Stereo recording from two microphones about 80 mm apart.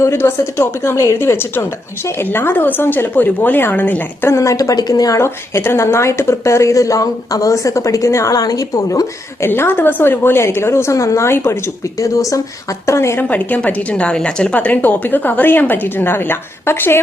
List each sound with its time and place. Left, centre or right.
0.0 s a woman's voice: left
4.3 s a woman's voice: left
9.4 s a woman's voice: left
11.9 s a woman's voice: left
13.2 s a woman's voice: centre